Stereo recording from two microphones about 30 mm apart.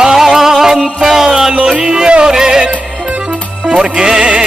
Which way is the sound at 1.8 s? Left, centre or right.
Right.